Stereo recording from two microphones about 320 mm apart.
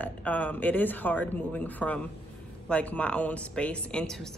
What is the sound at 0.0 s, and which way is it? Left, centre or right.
Speech, centre.